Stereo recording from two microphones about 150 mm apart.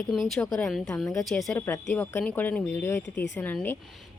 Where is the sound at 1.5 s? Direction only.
15° left (ahead or behind).